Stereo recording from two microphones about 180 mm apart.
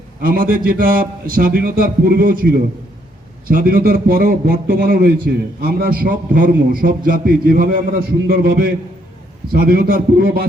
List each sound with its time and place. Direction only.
0.2 s a man's voice: 55° right (ahead or behind)